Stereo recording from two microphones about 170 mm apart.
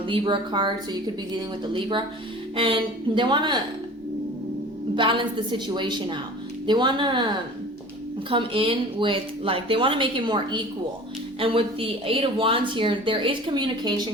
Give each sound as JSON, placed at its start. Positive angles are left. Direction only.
{"t": 0.1, "sound": "a woman's voice", "side_deg": -30}
{"t": 2.6, "sound": "a woman's voice", "side_deg": -30}
{"t": 4.9, "sound": "a woman's voice", "side_deg": -30}
{"t": 8.3, "sound": "speech", "side_deg": -30}